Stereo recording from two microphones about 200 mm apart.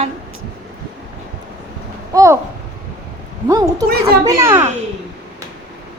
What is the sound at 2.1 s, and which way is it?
Speech, 15° right (ahead or behind).